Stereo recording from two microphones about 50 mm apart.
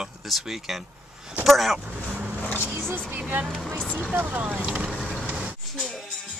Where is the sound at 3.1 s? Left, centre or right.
Right.